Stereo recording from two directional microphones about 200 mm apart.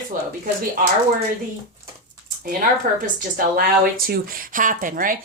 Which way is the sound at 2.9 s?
45° right (ahead or behind).